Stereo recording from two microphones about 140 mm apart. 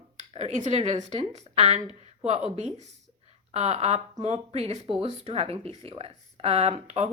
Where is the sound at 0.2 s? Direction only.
55° right (ahead or behind).